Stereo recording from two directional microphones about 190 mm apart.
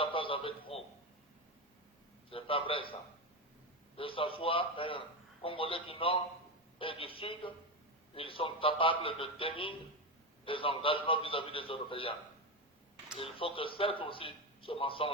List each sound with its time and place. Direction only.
0.0 s a man's voice: 25° left (ahead or behind)
2.3 s a man's voice: 30° left (ahead or behind)
13.1 s a man's voice: 30° left (ahead or behind)